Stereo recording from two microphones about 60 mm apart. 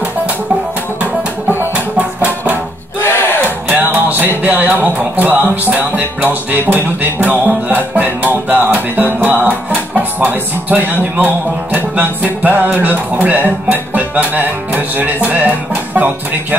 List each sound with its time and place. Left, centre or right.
2.0 s music: right
2.5 s a sound: left
3.6 s music: right
4.4 s speech: right
5.8 s music: right
6.7 s speech: right